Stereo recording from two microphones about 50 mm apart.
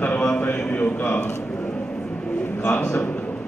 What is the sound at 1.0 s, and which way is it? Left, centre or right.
Speech, left.